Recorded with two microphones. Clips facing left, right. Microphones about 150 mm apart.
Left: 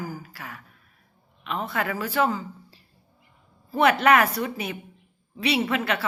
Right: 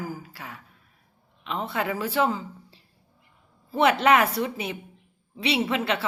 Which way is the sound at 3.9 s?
25° right (ahead or behind).